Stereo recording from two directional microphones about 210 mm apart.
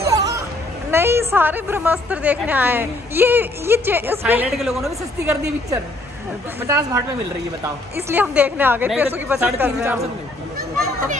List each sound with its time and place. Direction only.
0.0 s music: 15° right (ahead or behind)
0.9 s a woman's voice: 10° right (ahead or behind)
6.7 s a woman's voice: 15° right (ahead or behind)